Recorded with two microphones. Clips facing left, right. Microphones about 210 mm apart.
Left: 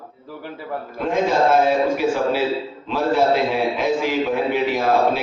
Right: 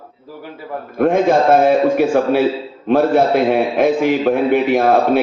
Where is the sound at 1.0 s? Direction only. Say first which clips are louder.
Right 6 dB; 55° right (ahead or behind).